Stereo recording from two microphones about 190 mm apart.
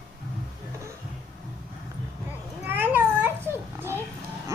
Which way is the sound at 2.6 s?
10° right (ahead or behind).